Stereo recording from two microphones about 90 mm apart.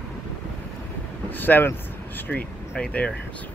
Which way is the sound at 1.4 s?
20° left (ahead or behind).